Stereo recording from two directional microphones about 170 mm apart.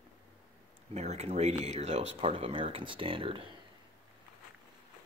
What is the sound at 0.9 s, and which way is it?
Speech, 40° right (ahead or behind).